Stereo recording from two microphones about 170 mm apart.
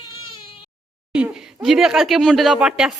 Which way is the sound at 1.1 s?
5° right (ahead or behind).